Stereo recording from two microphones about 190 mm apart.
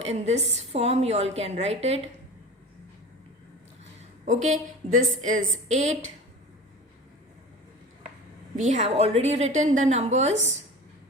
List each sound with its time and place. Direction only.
0.0 s a woman's voice: 35° right (ahead or behind)
4.3 s a woman's voice: 40° right (ahead or behind)
8.5 s a woman's voice: 40° right (ahead or behind)